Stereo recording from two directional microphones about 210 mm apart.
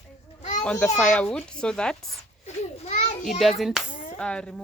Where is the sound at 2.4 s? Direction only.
30° left (ahead or behind).